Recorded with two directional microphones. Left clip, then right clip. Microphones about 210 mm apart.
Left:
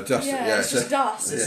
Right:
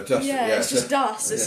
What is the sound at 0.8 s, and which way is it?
Speech, 45° right (ahead or behind).